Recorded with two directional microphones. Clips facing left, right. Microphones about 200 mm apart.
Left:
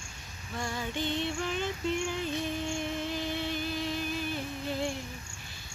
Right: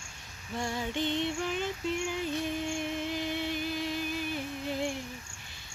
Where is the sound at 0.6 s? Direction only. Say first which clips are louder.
Right 2 dB; 20° right (ahead or behind).